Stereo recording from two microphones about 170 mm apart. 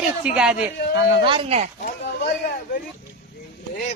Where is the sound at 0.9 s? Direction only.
30° right (ahead or behind).